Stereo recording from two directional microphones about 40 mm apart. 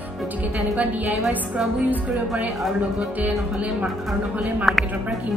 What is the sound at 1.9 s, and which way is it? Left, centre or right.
Speech, right.